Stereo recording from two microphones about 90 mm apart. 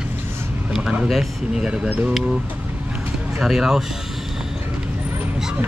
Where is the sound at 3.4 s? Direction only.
5° right (ahead or behind).